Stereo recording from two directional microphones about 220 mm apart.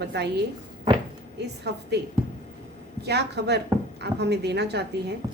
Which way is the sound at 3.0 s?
50° right (ahead or behind).